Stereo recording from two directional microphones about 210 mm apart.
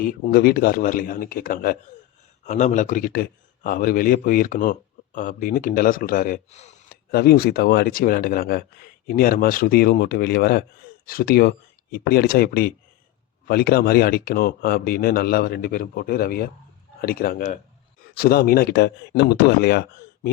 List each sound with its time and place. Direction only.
0.0 s a man's voice: 45° left (ahead or behind)
6.9 s speech: 50° left (ahead or behind)